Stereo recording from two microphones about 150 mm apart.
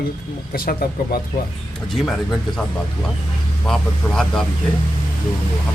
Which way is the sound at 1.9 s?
Centre (ahead or behind).